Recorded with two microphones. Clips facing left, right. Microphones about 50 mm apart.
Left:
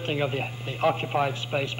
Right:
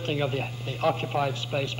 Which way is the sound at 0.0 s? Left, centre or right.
Left.